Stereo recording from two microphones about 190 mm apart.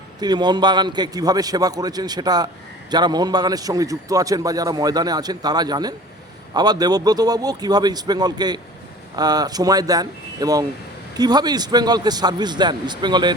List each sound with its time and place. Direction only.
0.2 s a man's voice: 20° right (ahead or behind)